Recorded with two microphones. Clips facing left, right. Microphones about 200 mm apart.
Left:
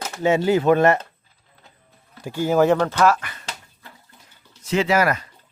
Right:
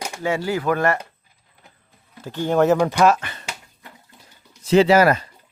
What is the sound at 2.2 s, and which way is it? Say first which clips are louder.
Speech: even; 10° left (ahead or behind).